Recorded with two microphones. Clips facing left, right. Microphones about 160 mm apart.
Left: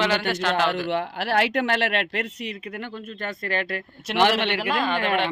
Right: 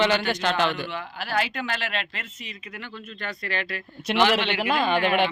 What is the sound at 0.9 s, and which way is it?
Speech, 75° left (ahead or behind).